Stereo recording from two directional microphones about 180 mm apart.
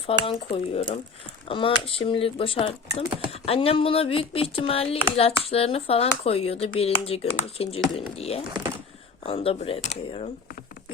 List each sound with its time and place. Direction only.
0.1 s speech: 30° left (ahead or behind)